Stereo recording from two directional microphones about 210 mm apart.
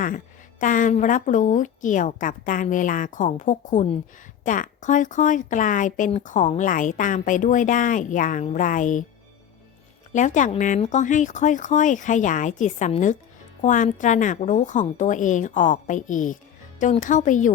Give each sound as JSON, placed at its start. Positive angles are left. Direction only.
{"t": 0.6, "sound": "speech", "side_deg": 40}
{"t": 10.1, "sound": "speech", "side_deg": 35}